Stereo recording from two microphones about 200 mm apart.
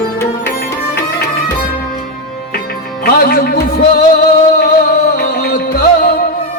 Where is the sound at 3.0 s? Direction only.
50° left (ahead or behind).